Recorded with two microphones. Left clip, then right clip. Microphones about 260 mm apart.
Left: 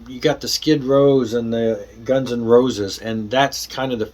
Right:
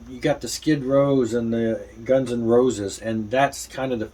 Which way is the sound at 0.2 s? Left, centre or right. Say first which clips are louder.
Left 5 dB; centre.